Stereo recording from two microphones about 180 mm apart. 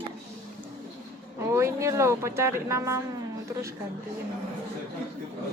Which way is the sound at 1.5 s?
15° right (ahead or behind).